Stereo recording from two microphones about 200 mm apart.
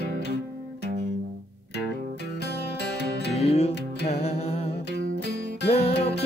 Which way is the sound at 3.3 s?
30° left (ahead or behind).